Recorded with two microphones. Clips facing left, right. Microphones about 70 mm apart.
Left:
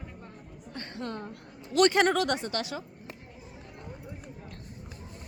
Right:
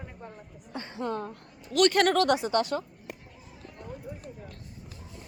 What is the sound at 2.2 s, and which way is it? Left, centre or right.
Speech, centre.